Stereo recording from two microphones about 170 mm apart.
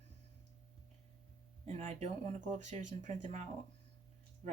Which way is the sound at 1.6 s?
40° right (ahead or behind).